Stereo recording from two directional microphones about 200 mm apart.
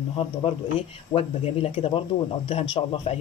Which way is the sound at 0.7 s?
30° left (ahead or behind).